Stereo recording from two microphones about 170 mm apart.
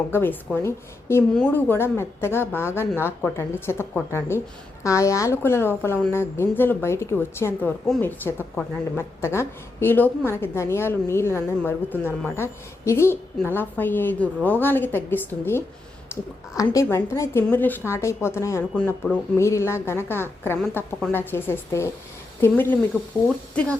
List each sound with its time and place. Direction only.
0.1 s a woman's voice: 10° left (ahead or behind)
16.7 s a woman's voice: 15° left (ahead or behind)